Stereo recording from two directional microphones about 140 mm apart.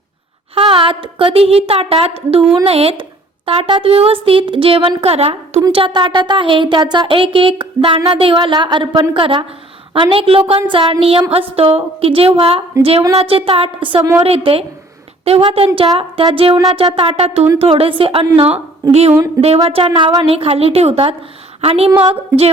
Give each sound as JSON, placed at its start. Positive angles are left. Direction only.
{"t": 0.5, "sound": "a woman's voice", "side_deg": -40}
{"t": 14.0, "sound": "a woman's voice", "side_deg": -20}
{"t": 14.3, "sound": "a woman's voice", "side_deg": -40}